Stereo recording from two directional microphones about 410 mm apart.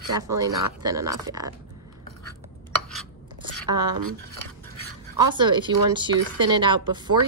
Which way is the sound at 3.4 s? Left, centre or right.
Centre.